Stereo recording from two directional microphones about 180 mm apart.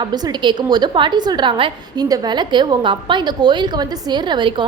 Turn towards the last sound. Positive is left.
turn(degrees=-25)  # may be behind; listen again after turning